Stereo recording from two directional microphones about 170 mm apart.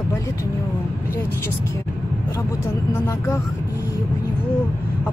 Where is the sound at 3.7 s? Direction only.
20° left (ahead or behind).